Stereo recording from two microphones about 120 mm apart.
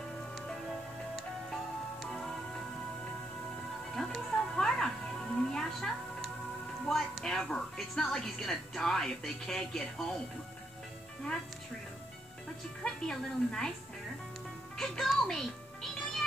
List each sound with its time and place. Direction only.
0.5 s music: centre (ahead or behind)
3.9 s music: 5° left (ahead or behind)
6.9 s a woman's voice: 5° left (ahead or behind)
12.8 s a woman's voice: 5° left (ahead or behind)
14.8 s music: 5° left (ahead or behind)